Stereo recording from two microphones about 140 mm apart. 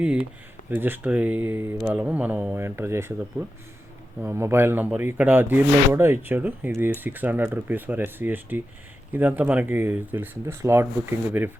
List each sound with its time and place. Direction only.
0.7 s speech: 15° right (ahead or behind)